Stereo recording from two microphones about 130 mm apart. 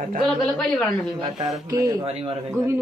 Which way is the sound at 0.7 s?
5° left (ahead or behind).